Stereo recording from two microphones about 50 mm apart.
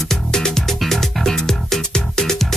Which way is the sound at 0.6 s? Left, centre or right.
Centre.